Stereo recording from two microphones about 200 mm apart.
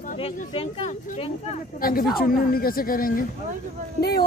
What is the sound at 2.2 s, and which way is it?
Speech, 50° left (ahead or behind).